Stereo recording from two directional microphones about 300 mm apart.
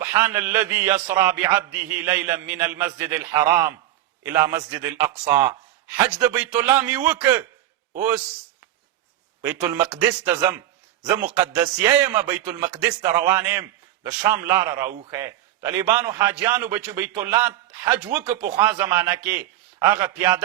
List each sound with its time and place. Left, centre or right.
0.0 s a man's voice: centre
9.4 s a man's voice: centre
11.3 s a man's voice: centre